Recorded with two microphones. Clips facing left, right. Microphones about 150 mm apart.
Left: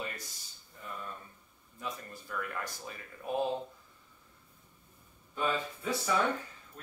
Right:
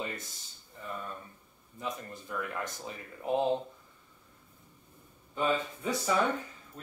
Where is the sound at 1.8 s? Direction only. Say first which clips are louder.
Right 3 dB; 20° right (ahead or behind).